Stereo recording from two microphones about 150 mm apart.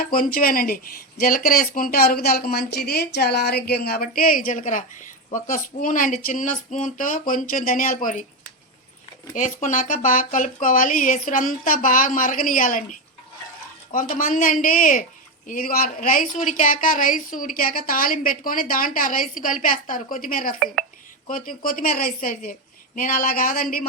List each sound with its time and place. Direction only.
0.0 s speech: 80° left
9.3 s speech: 55° left (ahead or behind)
15.4 s a woman's voice: 75° left (ahead or behind)
16.3 s a woman's voice: 55° left (ahead or behind)